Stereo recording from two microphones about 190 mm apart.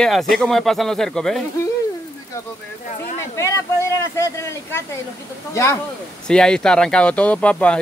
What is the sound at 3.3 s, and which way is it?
Speech, 15° left (ahead or behind).